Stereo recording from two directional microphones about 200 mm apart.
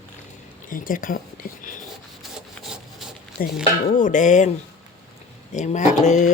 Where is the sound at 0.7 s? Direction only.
45° left (ahead or behind).